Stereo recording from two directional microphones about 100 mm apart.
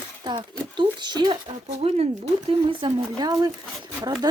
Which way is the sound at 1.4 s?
90° right.